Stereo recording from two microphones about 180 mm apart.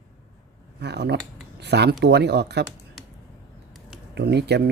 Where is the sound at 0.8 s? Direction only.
70° right (ahead or behind).